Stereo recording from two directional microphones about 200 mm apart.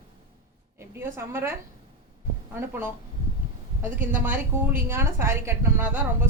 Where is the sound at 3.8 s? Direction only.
10° right (ahead or behind).